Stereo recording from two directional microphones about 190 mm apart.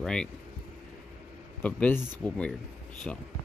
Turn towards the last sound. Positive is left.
turn(degrees=0)  # may be behind; listen again after turning